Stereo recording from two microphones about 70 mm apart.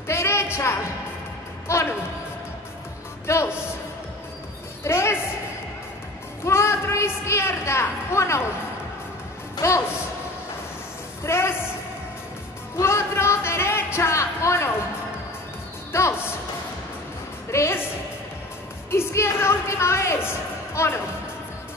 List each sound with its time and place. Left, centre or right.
0.1 s music: left
1.7 s speech: left
3.3 s speech: left
4.8 s a woman's voice: left
6.4 s a woman's voice: left
9.6 s speech: left
11.2 s a woman's voice: left
12.7 s music: left
15.9 s speech: left
17.5 s a woman's voice: left
18.9 s a woman's voice: left